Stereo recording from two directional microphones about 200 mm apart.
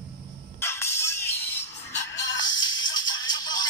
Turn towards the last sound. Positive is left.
turn(degrees=20)  # may be behind; listen again after turning